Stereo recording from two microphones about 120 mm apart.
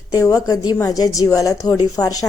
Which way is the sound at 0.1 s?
30° left (ahead or behind).